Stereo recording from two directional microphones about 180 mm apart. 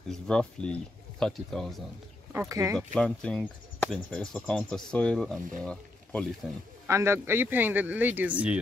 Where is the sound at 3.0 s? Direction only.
5° left (ahead or behind).